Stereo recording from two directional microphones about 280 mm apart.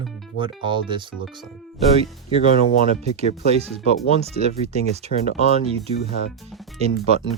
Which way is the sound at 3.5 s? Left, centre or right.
Right.